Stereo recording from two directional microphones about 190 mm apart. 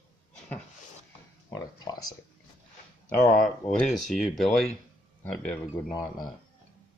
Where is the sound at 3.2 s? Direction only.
40° left (ahead or behind).